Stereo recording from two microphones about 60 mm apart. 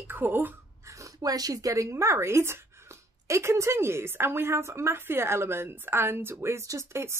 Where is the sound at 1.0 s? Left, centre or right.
Right.